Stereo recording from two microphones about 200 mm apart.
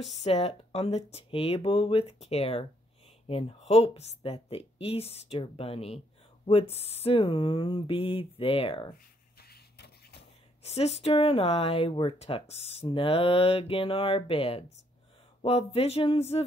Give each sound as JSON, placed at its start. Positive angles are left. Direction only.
{"t": 0.2, "sound": "speech", "side_deg": 30}
{"t": 9.4, "sound": "printer", "side_deg": 55}
{"t": 10.6, "sound": "speech", "side_deg": 30}